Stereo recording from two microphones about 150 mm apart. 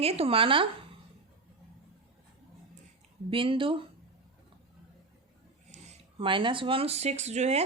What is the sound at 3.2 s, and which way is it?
Speech, 35° right (ahead or behind).